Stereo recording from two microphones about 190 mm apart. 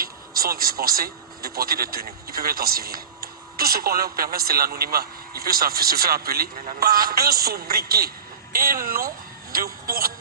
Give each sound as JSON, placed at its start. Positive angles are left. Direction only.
{"t": 0.0, "sound": "speech", "side_deg": -50}